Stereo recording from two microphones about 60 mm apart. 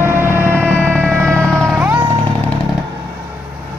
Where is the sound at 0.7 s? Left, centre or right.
Left.